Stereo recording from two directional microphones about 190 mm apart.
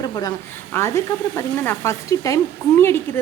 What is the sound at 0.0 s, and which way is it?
Speech, 20° left (ahead or behind).